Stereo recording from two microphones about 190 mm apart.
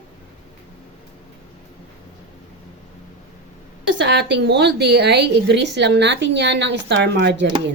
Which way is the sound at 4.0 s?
65° right (ahead or behind).